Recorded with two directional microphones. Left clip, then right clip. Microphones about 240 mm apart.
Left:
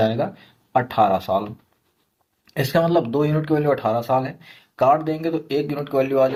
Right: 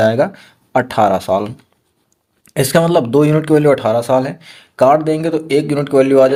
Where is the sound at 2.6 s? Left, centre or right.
Right.